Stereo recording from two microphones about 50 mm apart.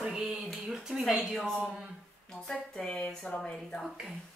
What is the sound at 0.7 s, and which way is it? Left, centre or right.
Speech, centre.